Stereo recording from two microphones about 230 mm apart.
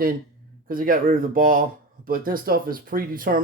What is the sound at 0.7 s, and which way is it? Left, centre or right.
Speech, right.